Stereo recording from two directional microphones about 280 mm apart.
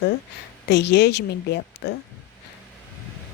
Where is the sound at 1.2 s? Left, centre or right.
Left.